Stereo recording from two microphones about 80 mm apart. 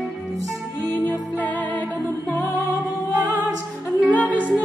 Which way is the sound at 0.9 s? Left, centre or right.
Left.